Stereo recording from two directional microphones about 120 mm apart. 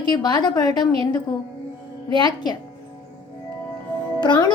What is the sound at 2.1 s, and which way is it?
Speech, 35° left (ahead or behind).